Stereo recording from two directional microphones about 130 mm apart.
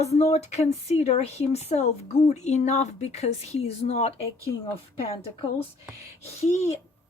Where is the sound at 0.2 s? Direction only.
55° left (ahead or behind).